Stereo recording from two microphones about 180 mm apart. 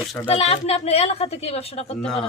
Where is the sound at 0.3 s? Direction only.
35° left (ahead or behind).